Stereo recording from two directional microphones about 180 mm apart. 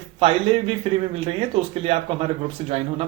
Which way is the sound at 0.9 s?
35° right (ahead or behind).